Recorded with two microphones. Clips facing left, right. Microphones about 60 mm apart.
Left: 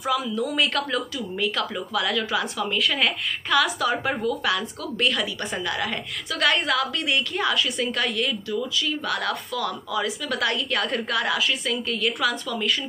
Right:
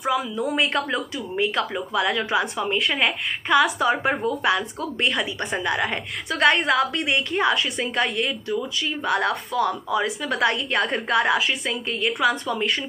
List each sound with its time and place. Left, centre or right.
0.0 s a woman's voice: right
6.4 s a woman's voice: right